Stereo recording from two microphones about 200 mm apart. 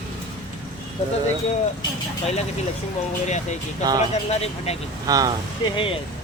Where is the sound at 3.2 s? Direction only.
35° left (ahead or behind).